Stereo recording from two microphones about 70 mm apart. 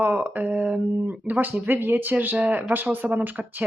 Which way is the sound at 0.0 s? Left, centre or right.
Right.